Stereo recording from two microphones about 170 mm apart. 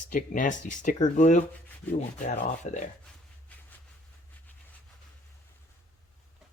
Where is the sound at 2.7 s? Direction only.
45° left (ahead or behind).